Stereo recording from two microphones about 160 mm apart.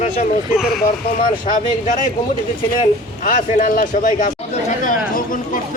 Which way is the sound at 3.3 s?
60° left (ahead or behind).